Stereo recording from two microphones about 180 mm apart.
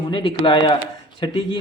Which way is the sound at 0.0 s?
30° left (ahead or behind).